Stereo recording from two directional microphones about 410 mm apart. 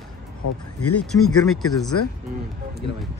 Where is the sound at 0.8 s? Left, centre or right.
Left.